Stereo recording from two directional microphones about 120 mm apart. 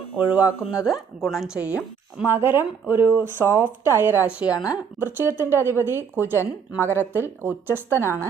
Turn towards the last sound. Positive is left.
turn(degrees=-15)  # may be behind; listen again after turning